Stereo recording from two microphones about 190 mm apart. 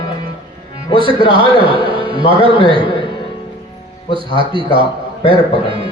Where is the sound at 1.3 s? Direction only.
25° right (ahead or behind).